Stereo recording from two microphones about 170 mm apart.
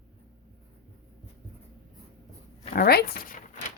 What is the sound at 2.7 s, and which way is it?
Speech, 70° left (ahead or behind).